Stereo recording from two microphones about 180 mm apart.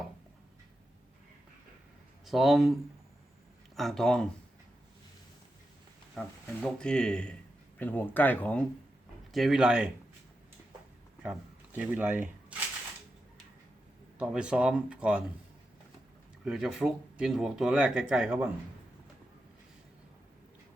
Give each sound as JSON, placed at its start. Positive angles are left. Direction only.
{"t": 2.2, "sound": "speech", "side_deg": 0}
{"t": 3.8, "sound": "speech", "side_deg": 0}
{"t": 6.1, "sound": "speech", "side_deg": 5}
{"t": 11.2, "sound": "speech", "side_deg": -5}
{"t": 14.2, "sound": "speech", "side_deg": -5}
{"t": 16.4, "sound": "speech", "side_deg": -5}